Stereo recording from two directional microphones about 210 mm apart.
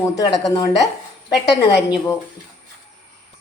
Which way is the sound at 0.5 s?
15° left (ahead or behind).